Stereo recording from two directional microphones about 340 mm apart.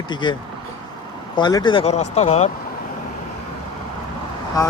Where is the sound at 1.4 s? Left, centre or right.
Centre.